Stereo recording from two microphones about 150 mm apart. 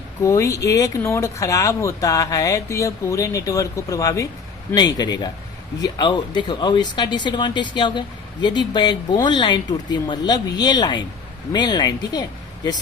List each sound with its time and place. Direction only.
0.2 s speech: 20° left (ahead or behind)